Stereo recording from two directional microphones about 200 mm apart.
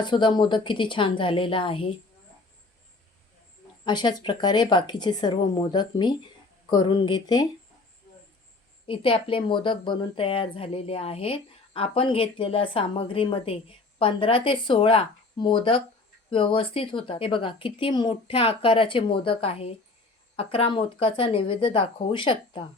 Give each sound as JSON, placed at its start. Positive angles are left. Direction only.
{"t": 0.0, "sound": "speech", "side_deg": 25}
{"t": 3.8, "sound": "speech", "side_deg": 20}
{"t": 8.9, "sound": "speech", "side_deg": 25}